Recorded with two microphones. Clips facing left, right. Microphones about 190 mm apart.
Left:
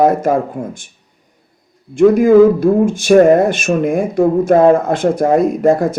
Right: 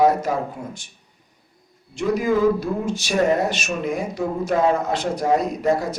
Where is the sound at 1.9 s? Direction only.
50° left (ahead or behind).